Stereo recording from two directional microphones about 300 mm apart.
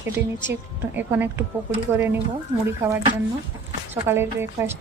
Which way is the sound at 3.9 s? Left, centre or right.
Centre.